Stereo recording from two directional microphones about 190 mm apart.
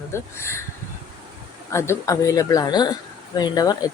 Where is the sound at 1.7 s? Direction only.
15° left (ahead or behind).